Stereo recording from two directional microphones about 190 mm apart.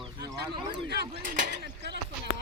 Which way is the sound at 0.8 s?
60° right (ahead or behind).